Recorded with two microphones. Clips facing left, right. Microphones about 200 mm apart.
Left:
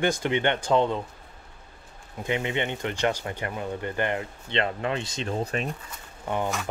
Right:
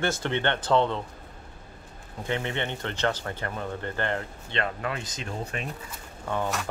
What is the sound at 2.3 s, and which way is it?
Speech, 15° left (ahead or behind).